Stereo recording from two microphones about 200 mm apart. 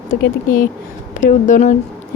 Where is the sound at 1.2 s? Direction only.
40° left (ahead or behind).